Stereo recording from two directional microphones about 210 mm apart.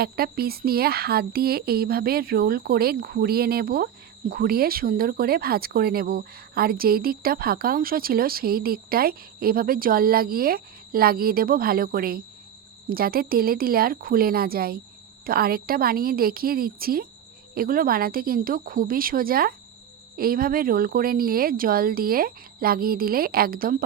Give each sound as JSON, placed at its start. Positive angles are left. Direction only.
{"t": 0.0, "sound": "speech", "side_deg": -45}